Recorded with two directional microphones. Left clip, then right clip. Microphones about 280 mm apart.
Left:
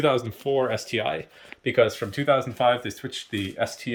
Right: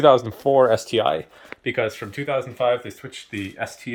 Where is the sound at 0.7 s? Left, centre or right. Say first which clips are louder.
Right 7 dB; right.